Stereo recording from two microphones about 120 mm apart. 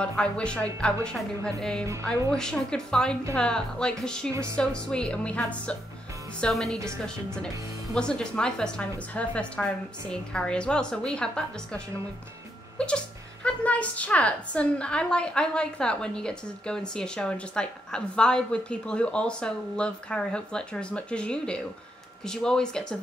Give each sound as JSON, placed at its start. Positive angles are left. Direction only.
{"t": 0.0, "sound": "a woman's voice", "side_deg": 10}
{"t": 4.3, "sound": "speech", "side_deg": -25}
{"t": 4.6, "sound": "a woman's voice", "side_deg": 10}
{"t": 7.9, "sound": "a woman's voice", "side_deg": 5}